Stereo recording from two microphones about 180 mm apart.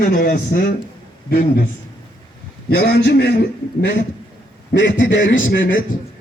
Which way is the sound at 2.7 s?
60° left (ahead or behind).